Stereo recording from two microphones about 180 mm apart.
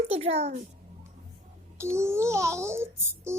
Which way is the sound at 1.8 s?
15° right (ahead or behind).